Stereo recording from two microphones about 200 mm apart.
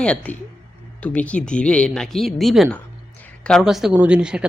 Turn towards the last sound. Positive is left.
turn(degrees=-5)  # may be behind; listen again after turning